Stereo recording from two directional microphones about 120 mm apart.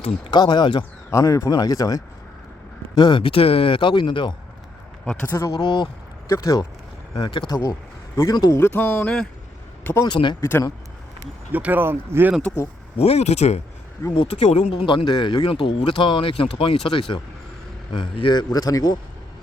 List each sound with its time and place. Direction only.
0.3 s a man's voice: 40° left (ahead or behind)
1.1 s a man's voice: 30° left (ahead or behind)
2.9 s speech: 40° left (ahead or behind)
5.0 s a man's voice: 15° left (ahead or behind)
5.4 s speech: 35° left (ahead or behind)
7.2 s speech: 40° left (ahead or behind); by 9.2 s 10° left (ahead or behind)
9.8 s speech: 20° left (ahead or behind)
10.1 s a man's voice: 40° left (ahead or behind)
10.4 s speech: 25° left (ahead or behind)
11.5 s speech: 15° right (ahead or behind)
13.0 s a man's voice: 60° left (ahead or behind); by 18.9 s 30° left (ahead or behind)